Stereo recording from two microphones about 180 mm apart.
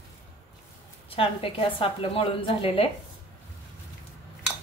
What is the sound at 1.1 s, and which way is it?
A woman's voice, 30° left (ahead or behind).